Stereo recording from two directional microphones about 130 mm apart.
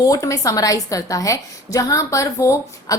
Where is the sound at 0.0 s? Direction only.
25° left (ahead or behind).